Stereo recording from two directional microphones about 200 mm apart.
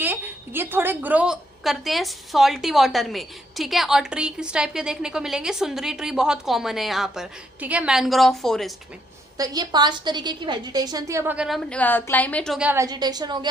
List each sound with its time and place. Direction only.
0.0 s a woman's voice: 10° right (ahead or behind)
9.4 s a woman's voice: 20° right (ahead or behind)